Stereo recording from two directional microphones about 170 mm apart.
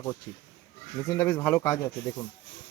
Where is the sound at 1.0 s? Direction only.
15° left (ahead or behind).